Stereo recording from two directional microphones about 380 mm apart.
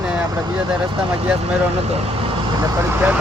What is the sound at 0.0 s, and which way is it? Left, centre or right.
Vehicle, centre.